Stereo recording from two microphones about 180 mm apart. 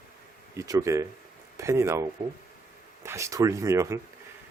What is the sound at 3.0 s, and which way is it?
Speech, 15° right (ahead or behind).